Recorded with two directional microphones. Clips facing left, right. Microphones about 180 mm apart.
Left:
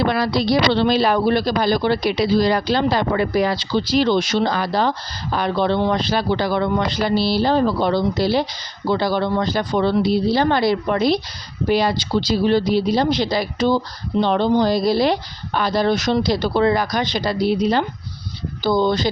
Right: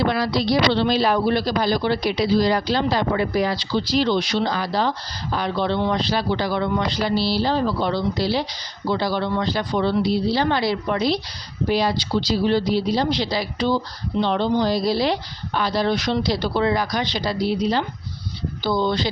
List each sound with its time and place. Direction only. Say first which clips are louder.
0.0 s speech: left 2 dB; 55° left (ahead or behind)
18.6 s speech: left 4 dB; 45° left (ahead or behind)